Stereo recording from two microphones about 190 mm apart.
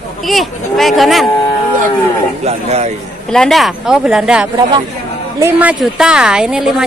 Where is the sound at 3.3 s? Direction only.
Centre (ahead or behind).